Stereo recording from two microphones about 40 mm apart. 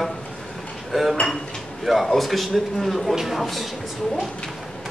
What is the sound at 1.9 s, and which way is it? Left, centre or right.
Speech, centre.